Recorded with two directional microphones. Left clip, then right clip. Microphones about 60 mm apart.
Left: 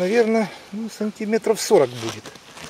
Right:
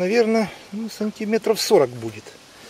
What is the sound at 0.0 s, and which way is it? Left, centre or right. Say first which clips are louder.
Speech: even; centre.